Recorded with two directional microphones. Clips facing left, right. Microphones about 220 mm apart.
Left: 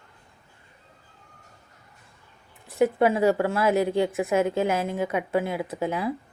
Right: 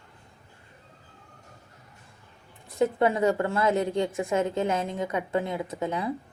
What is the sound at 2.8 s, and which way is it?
A woman's voice, 5° left (ahead or behind).